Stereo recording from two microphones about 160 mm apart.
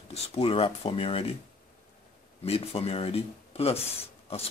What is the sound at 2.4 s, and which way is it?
Speech, 40° left (ahead or behind).